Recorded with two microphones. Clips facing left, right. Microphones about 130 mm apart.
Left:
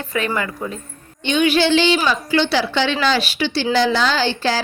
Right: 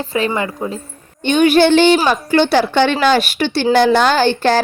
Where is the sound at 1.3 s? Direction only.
50° right (ahead or behind).